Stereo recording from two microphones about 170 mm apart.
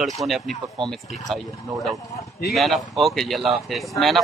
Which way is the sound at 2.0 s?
20° left (ahead or behind).